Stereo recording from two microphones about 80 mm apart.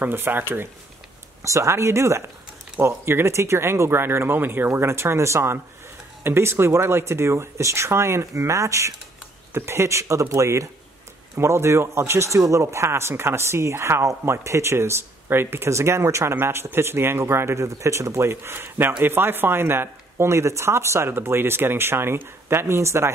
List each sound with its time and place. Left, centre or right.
0.0 s speech: right
1.4 s speech: right